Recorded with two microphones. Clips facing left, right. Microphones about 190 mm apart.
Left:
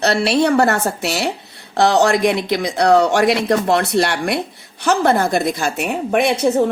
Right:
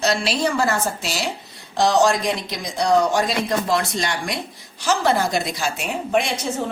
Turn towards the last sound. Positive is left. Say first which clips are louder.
# left 6 dB
turn(degrees=60)  # may be behind; listen again after turning